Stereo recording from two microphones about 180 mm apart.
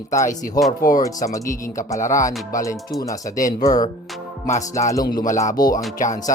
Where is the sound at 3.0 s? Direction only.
20° left (ahead or behind).